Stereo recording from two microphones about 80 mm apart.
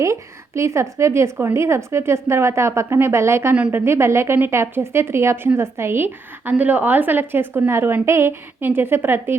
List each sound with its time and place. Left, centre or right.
0.0 s a woman's voice: right
3.5 s a woman's voice: right